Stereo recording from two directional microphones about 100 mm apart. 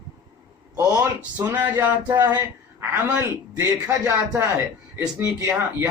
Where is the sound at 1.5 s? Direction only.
20° right (ahead or behind).